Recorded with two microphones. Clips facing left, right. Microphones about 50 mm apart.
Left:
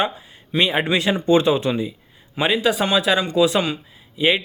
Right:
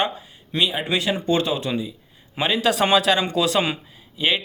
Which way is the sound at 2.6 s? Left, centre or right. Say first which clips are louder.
Right 4 dB; centre.